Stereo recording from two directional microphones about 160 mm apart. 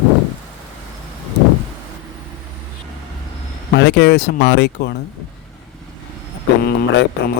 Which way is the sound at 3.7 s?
90° left.